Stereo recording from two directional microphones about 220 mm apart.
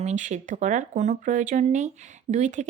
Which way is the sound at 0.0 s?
30° right (ahead or behind).